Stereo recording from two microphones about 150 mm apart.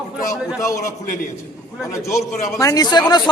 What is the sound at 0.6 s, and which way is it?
Speech, 20° left (ahead or behind).